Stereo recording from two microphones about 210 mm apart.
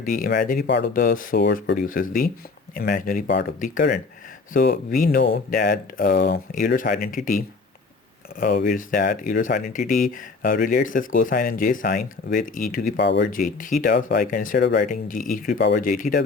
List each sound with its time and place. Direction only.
0.0 s speech: 40° left (ahead or behind)
13.0 s speech: 55° left (ahead or behind)
13.3 s speech: 40° left (ahead or behind)
15.5 s speech: 50° left (ahead or behind)